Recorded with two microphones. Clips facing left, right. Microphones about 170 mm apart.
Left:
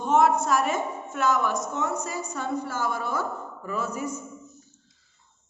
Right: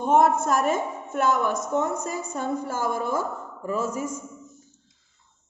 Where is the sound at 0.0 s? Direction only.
50° right (ahead or behind).